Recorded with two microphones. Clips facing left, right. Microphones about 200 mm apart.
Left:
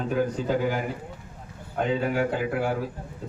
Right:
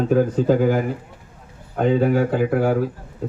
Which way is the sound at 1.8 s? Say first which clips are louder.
Right 7 dB; 45° right (ahead or behind).